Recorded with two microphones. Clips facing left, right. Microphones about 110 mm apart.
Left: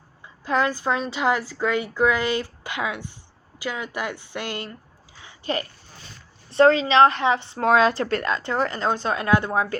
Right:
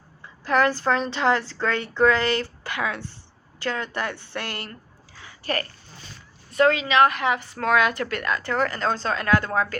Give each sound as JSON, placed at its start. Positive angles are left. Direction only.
{"t": 0.4, "sound": "a woman's voice", "side_deg": 20}
{"t": 5.2, "sound": "a sound", "side_deg": 20}
{"t": 6.5, "sound": "speech", "side_deg": 30}